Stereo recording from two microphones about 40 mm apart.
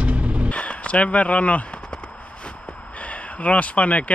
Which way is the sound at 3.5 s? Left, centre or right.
Left.